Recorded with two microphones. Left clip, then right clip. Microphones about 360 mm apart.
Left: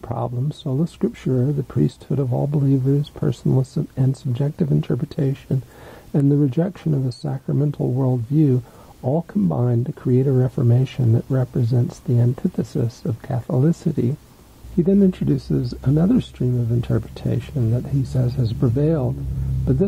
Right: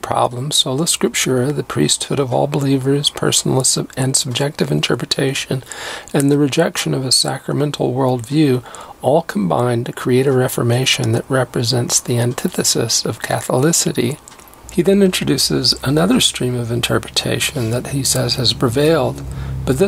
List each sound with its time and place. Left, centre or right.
0.1 s speech: centre
13.3 s speech: centre